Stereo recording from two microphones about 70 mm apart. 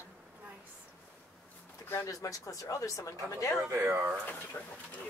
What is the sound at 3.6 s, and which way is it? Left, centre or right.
Speech, right.